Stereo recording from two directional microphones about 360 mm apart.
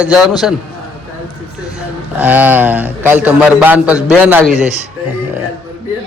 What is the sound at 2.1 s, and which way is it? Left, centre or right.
A man's voice, centre.